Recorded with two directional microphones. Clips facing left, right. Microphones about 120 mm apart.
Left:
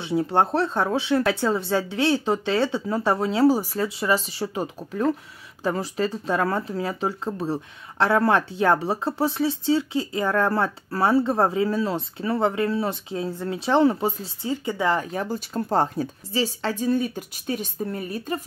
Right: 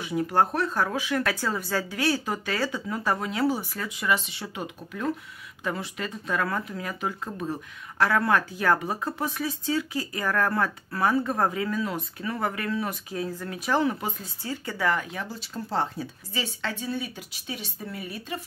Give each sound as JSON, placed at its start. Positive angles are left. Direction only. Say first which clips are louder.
{"t": 0.0, "sound": "speech", "louder": "left 2 dB", "side_deg": 25}
{"t": 15.0, "sound": "speech", "louder": "left 6 dB", "side_deg": 40}
{"t": 16.3, "sound": "speech", "louder": "left 7 dB", "side_deg": 35}